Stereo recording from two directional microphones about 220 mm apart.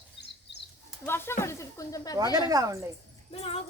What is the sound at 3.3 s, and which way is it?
Speech, 25° left (ahead or behind).